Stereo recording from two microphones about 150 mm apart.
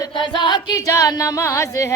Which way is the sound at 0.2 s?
30° left (ahead or behind).